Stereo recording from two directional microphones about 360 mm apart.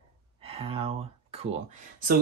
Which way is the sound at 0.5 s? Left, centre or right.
Centre.